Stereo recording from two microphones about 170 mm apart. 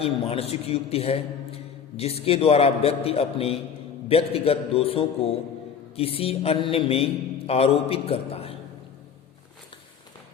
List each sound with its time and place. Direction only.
0.0 s a man's voice: 35° left (ahead or behind)